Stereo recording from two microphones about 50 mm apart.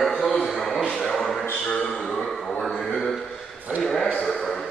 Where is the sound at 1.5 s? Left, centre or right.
Left.